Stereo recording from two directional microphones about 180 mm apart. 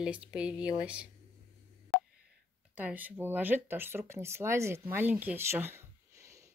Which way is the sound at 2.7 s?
10° right (ahead or behind).